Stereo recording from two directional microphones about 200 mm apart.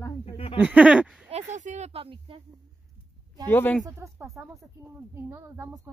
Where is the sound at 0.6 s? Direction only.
5° right (ahead or behind).